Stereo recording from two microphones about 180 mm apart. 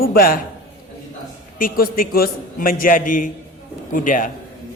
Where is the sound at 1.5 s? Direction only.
50° left (ahead or behind).